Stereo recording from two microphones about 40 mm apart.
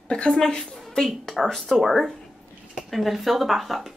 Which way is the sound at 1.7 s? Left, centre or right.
Centre.